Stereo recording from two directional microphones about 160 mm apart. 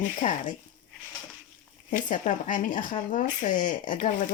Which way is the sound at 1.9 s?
55° left (ahead or behind).